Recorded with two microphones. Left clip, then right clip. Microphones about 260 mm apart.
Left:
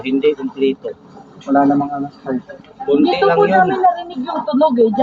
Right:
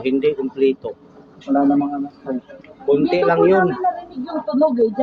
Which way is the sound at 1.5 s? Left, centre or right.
Left.